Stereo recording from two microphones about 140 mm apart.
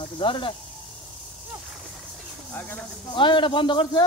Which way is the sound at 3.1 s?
35° left (ahead or behind).